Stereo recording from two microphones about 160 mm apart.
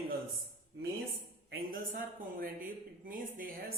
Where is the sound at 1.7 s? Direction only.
60° right (ahead or behind).